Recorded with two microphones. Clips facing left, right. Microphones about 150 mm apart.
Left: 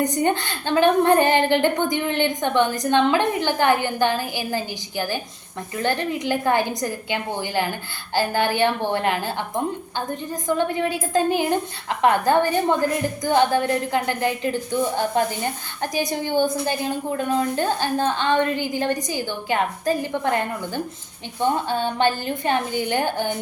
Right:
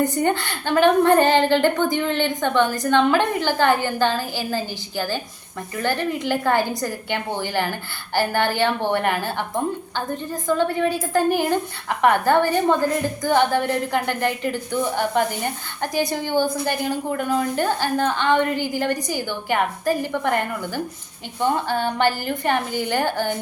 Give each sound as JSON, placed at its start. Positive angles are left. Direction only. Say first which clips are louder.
{"t": 0.0, "sound": "a woman's voice", "louder": "right 1 dB", "side_deg": 20}
{"t": 10.4, "sound": "a woman's voice", "louder": "right 2 dB", "side_deg": 20}